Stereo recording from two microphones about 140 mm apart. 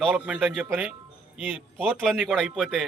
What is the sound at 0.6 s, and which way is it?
Speech, 10° right (ahead or behind).